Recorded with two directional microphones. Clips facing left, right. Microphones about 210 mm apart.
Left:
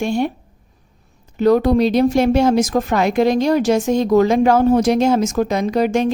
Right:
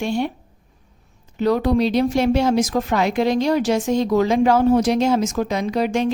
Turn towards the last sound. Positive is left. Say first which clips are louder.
# left 3 dB
turn(degrees=45)  # may be behind; listen again after turning